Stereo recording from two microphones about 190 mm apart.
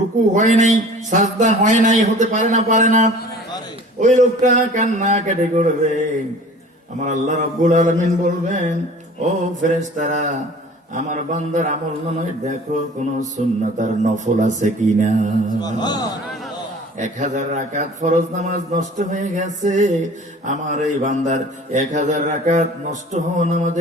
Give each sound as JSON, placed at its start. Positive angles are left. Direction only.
{"t": 0.3, "sound": "a man's voice", "side_deg": -40}
{"t": 7.0, "sound": "a man's voice", "side_deg": -40}
{"t": 15.6, "sound": "a man's voice", "side_deg": 20}
{"t": 17.0, "sound": "a man's voice", "side_deg": -40}